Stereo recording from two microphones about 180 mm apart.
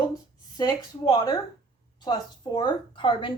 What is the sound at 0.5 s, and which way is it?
A woman's voice, 25° left (ahead or behind).